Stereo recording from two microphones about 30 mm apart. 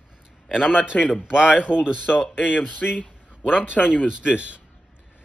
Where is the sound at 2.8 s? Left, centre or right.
Left.